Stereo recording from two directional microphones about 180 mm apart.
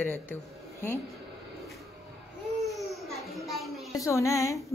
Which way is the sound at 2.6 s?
Centre (ahead or behind).